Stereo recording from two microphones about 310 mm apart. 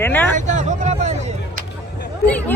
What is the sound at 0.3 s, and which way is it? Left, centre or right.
Vehicle, right.